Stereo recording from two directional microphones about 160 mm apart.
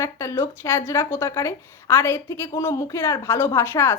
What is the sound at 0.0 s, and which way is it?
Speech, 20° left (ahead or behind).